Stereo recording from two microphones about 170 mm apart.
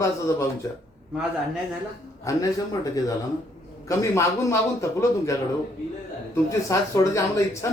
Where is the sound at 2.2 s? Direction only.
20° left (ahead or behind).